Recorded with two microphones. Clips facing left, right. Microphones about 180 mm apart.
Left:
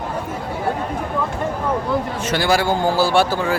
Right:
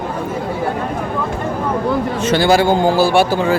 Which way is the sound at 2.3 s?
25° right (ahead or behind).